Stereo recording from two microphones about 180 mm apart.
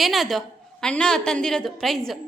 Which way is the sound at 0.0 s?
Centre (ahead or behind).